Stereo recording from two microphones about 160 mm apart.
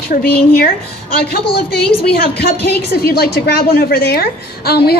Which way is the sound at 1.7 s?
80° left.